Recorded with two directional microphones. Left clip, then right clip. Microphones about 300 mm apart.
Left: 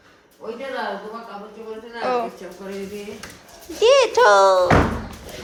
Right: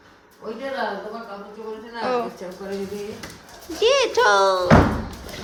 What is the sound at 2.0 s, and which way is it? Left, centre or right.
Speech, centre.